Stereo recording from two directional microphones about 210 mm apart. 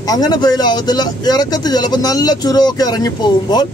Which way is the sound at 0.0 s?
20° left (ahead or behind).